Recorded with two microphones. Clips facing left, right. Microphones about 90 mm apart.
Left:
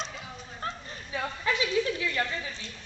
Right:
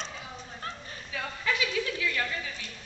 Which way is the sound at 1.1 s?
25° left (ahead or behind).